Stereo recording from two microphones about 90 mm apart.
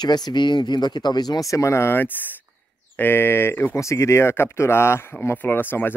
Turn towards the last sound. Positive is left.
turn(degrees=25)  # may be behind; listen again after turning